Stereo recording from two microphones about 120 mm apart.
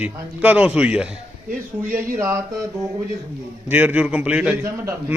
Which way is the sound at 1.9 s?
20° right (ahead or behind).